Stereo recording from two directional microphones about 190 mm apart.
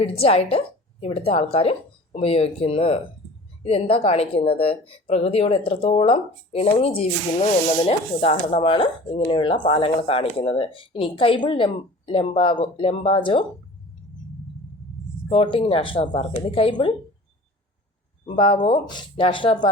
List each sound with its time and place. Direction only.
0.0 s speech: 30° left (ahead or behind)
15.3 s speech: 30° left (ahead or behind)
18.3 s speech: 25° left (ahead or behind)